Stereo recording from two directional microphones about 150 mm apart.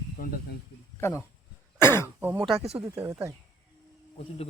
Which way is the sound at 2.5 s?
40° right (ahead or behind).